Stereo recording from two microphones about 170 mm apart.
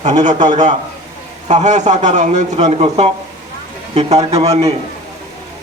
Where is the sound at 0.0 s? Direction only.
45° right (ahead or behind).